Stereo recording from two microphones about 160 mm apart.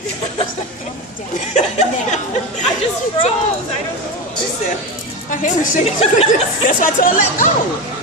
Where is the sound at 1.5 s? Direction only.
45° left (ahead or behind).